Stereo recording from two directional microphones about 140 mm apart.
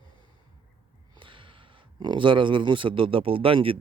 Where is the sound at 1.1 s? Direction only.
35° right (ahead or behind).